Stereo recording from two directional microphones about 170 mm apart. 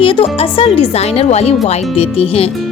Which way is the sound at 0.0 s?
30° left (ahead or behind).